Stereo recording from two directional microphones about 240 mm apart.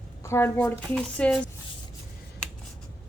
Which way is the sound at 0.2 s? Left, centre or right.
Centre.